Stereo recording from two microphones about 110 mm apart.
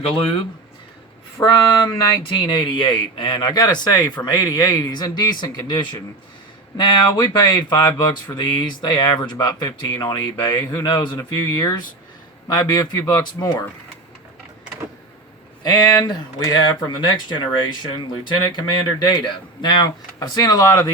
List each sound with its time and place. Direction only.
1.4 s a sound: 25° left (ahead or behind)
1.9 s speech: 35° left (ahead or behind)
15.6 s speech: 40° left (ahead or behind)